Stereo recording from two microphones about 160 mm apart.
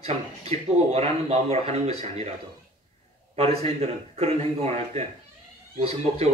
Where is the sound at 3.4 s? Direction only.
40° right (ahead or behind).